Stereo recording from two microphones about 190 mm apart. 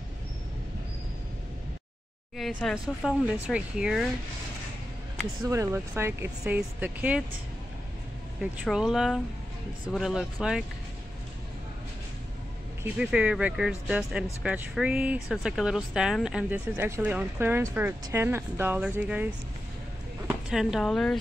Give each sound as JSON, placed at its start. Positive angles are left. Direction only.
{"t": 2.3, "sound": "speech", "side_deg": 0}
{"t": 5.5, "sound": "speech", "side_deg": -15}
{"t": 8.4, "sound": "speech", "side_deg": -5}
{"t": 12.8, "sound": "speech", "side_deg": -5}
{"t": 20.4, "sound": "speech", "side_deg": -5}